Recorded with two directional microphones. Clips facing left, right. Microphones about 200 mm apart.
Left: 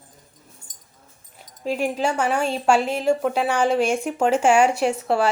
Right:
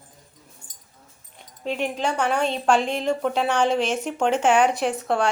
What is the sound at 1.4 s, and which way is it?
Speech, 5° left (ahead or behind).